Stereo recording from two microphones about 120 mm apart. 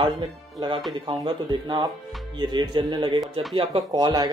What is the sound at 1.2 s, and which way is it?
Speech, 35° right (ahead or behind).